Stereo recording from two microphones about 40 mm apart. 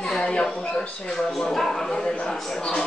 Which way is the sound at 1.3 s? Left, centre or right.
Centre.